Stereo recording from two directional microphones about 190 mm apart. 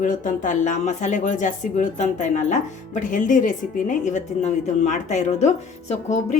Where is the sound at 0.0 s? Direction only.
45° left (ahead or behind).